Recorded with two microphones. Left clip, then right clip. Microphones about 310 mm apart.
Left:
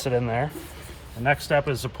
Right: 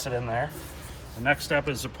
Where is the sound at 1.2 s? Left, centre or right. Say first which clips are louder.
Left 3 dB; left.